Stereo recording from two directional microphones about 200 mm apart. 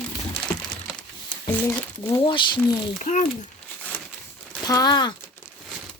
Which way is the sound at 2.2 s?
25° left (ahead or behind).